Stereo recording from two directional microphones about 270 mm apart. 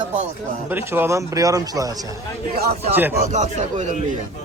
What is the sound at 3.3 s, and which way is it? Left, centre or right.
Speech, right.